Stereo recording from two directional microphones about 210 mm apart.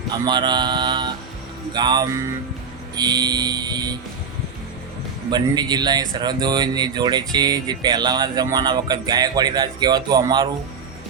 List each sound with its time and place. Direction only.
0.1 s speech: 20° right (ahead or behind)
5.3 s speech: 20° right (ahead or behind)